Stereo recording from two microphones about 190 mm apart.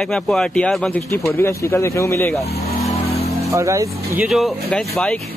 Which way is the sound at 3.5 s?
15° right (ahead or behind).